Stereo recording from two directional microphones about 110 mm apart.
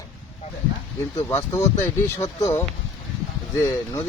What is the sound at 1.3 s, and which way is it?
Speech, 25° left (ahead or behind).